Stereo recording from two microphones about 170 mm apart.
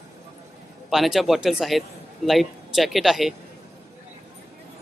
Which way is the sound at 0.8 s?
Centre (ahead or behind).